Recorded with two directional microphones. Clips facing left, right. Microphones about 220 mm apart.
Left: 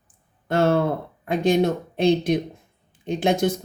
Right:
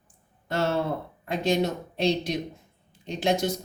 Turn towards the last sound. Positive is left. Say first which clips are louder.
# left 5 dB
turn(degrees=55)  # may be behind; listen again after turning